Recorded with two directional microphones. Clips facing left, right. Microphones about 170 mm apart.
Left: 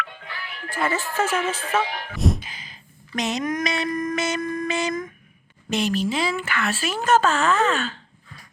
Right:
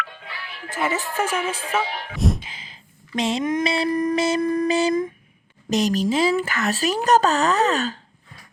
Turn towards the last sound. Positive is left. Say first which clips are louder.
# right 1 dB
turn(degrees=-40)  # may be behind; listen again after turning